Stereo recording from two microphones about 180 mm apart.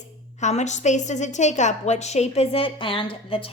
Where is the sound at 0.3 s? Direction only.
40° left (ahead or behind).